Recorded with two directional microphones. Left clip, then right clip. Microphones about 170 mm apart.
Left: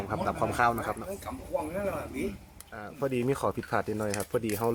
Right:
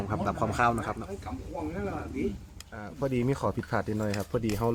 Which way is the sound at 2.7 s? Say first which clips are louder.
Even; 5° left (ahead or behind).